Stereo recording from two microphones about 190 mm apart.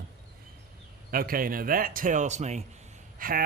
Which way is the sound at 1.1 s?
50° right (ahead or behind).